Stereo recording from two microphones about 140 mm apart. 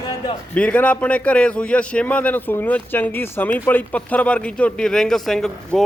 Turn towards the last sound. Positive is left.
turn(degrees=0)  # may be behind; listen again after turning